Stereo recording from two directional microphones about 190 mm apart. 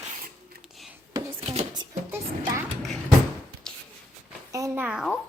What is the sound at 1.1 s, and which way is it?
Dishes, 30° right (ahead or behind).